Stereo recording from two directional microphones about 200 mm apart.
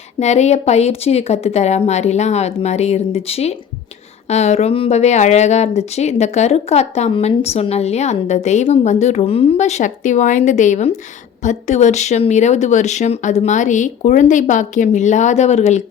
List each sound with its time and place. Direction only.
0.2 s a woman's voice: 35° left (ahead or behind)